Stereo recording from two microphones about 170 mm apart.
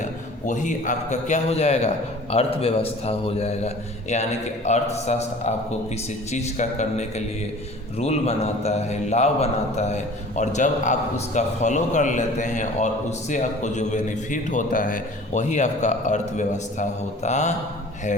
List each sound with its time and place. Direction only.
0.0 s a man's voice: 45° left (ahead or behind)